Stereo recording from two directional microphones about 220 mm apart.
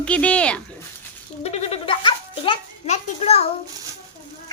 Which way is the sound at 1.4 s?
25° left (ahead or behind).